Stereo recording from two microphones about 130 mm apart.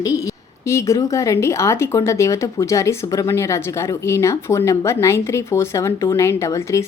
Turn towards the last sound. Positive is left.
turn(degrees=20)  # may be behind; listen again after turning